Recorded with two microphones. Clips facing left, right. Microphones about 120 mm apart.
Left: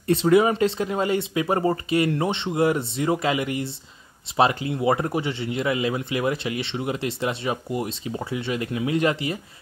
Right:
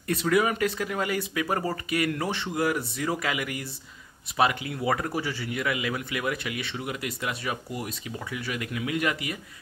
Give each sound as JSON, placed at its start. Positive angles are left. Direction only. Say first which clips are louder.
{"t": 0.0, "sound": "speech", "louder": "left 6 dB", "side_deg": 25}